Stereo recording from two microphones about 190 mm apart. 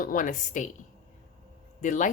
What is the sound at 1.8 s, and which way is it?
Speech, 40° left (ahead or behind).